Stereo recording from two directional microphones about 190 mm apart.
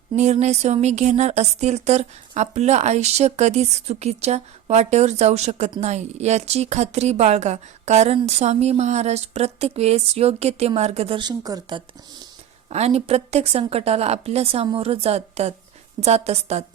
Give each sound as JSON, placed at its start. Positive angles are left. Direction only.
{"t": 0.2, "sound": "speech", "side_deg": -35}
{"t": 12.7, "sound": "speech", "side_deg": -35}